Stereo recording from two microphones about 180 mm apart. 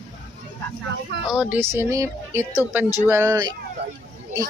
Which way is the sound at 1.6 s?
15° right (ahead or behind).